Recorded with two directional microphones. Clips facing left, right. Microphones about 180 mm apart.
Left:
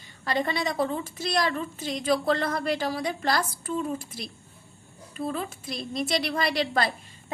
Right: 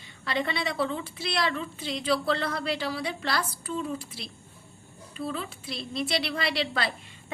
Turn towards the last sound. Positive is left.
turn(degrees=45)  # may be behind; listen again after turning